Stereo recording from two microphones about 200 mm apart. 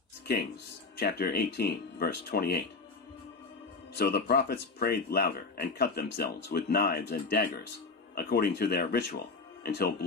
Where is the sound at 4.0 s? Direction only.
55° left (ahead or behind).